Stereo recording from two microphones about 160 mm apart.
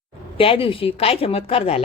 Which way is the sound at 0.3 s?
35° left (ahead or behind).